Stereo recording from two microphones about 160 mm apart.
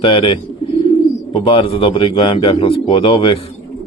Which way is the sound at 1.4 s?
35° left (ahead or behind).